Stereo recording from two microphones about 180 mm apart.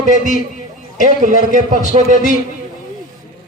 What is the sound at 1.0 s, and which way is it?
A man's voice, 45° right (ahead or behind).